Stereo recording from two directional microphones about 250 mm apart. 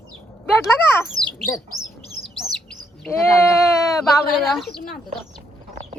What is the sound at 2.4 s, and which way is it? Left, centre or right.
Bird, centre.